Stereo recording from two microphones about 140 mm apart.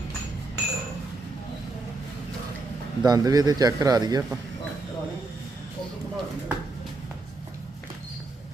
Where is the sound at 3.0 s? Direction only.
25° right (ahead or behind).